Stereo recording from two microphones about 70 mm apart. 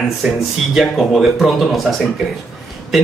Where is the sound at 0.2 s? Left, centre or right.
Centre.